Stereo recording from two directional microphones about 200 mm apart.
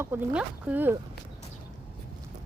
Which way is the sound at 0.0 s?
10° right (ahead or behind).